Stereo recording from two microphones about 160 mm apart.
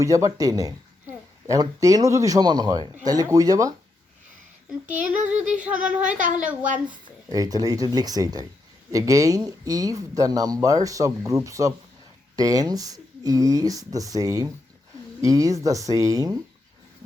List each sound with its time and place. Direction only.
0.0 s speech: 20° right (ahead or behind)
5.0 s a sound: 10° right (ahead or behind)
7.3 s speech: 25° right (ahead or behind)